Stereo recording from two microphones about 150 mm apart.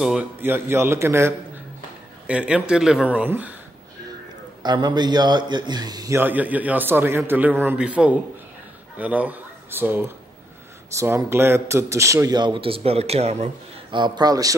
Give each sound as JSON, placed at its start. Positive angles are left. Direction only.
{"t": 0.0, "sound": "a man's voice", "side_deg": -5}
{"t": 0.4, "sound": "a man's voice", "side_deg": -15}
{"t": 4.6, "sound": "a man's voice", "side_deg": -30}
{"t": 13.8, "sound": "a man's voice", "side_deg": -30}